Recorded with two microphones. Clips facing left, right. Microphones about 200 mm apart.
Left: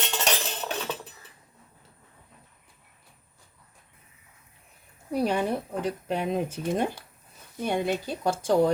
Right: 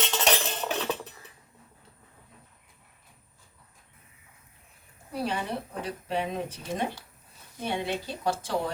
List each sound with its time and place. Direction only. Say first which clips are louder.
0.1 s cutlery: right 2 dB; centre (ahead or behind)
5.3 s speech: left 6 dB; 50° left (ahead or behind)